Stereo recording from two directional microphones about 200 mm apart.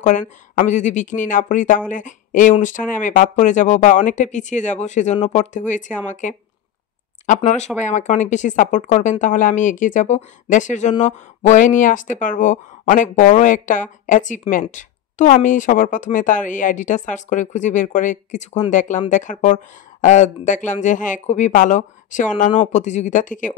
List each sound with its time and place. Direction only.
0.0 s speech: 40° left (ahead or behind)